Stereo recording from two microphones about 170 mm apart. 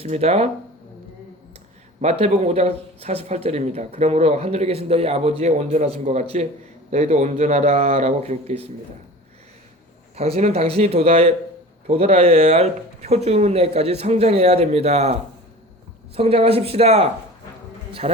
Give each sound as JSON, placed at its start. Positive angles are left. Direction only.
{"t": 0.0, "sound": "speech", "side_deg": -40}
{"t": 2.0, "sound": "speech", "side_deg": -40}
{"t": 10.2, "sound": "a man's voice", "side_deg": -40}